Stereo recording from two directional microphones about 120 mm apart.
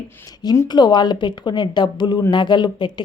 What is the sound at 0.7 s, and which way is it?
A woman's voice, 35° left (ahead or behind).